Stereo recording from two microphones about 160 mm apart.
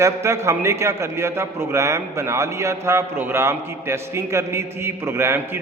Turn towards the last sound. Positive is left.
turn(degrees=-15)  # may be behind; listen again after turning